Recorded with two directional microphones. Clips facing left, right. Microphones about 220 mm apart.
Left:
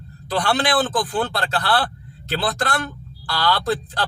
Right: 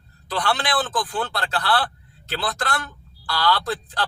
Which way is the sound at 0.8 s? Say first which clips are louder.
Left 4 dB; 25° left (ahead or behind).